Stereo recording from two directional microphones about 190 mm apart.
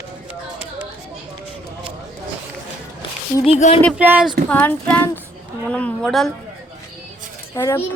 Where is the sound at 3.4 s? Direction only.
35° left (ahead or behind).